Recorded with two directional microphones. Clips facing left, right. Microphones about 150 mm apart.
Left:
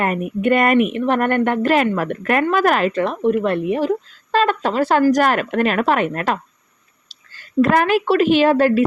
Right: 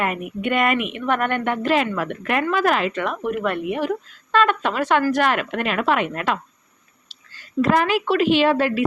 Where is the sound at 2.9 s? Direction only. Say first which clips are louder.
Left 6 dB; 35° left (ahead or behind).